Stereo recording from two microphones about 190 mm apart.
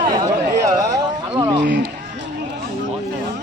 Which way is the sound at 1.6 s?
65° right (ahead or behind).